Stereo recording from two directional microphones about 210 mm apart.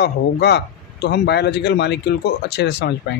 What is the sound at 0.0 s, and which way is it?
Speech, 50° left (ahead or behind).